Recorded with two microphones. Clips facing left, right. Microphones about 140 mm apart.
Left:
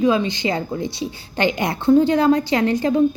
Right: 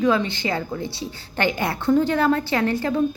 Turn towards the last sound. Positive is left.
turn(degrees=20)  # may be behind; listen again after turning